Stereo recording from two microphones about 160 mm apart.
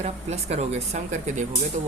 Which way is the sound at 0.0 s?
40° right (ahead or behind).